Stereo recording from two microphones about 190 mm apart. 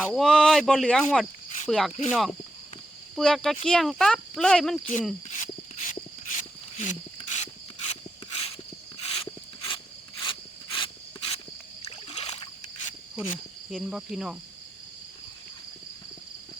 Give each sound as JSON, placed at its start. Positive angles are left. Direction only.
{"t": 0.0, "sound": "speech", "side_deg": 0}
{"t": 5.3, "sound": "a sound", "side_deg": 40}
{"t": 8.3, "sound": "walk", "side_deg": 30}
{"t": 9.0, "sound": "a sound", "side_deg": 30}
{"t": 11.8, "sound": "rowboat", "side_deg": 30}
{"t": 13.7, "sound": "speech", "side_deg": 0}